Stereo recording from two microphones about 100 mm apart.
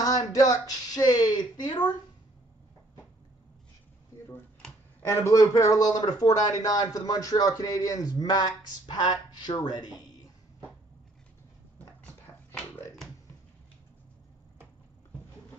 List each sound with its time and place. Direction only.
0.0 s speech: 35° left (ahead or behind)
5.0 s speech: 30° left (ahead or behind); by 9.9 s 45° left (ahead or behind)
12.3 s a sound: 25° left (ahead or behind)